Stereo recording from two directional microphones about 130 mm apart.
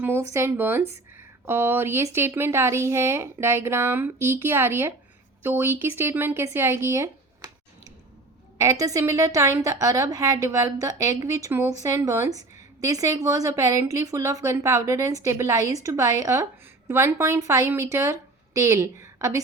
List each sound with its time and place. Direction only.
0.0 s a woman's voice: 20° right (ahead or behind)
8.5 s a woman's voice: 25° right (ahead or behind)